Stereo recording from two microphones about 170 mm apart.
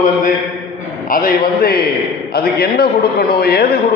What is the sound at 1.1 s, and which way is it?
A man's voice, 55° left (ahead or behind).